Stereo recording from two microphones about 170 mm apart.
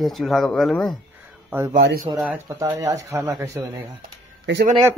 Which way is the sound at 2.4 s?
20° right (ahead or behind).